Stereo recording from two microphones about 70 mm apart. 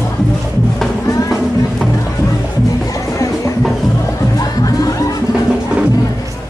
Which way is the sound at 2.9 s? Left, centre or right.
Left.